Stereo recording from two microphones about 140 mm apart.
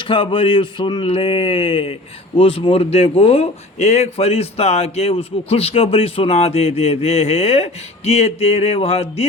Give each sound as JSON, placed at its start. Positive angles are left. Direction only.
{"t": 0.0, "sound": "speech", "side_deg": 35}